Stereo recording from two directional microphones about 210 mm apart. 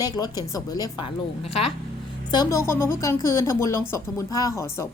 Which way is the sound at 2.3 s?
15° left (ahead or behind).